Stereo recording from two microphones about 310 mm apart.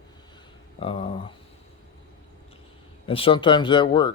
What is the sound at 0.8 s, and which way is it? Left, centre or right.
Speech, centre.